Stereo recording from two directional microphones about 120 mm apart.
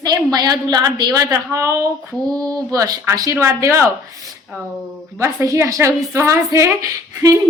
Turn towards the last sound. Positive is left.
turn(degrees=-25)  # may be behind; listen again after turning